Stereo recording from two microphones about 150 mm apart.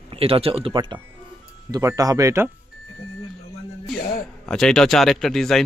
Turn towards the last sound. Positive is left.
turn(degrees=0)  # may be behind; listen again after turning